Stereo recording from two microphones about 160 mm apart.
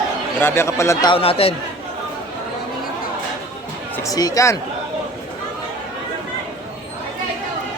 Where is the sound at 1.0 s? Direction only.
35° left (ahead or behind).